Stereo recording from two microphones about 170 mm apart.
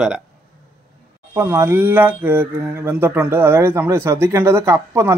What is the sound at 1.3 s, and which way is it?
Speech, 15° right (ahead or behind).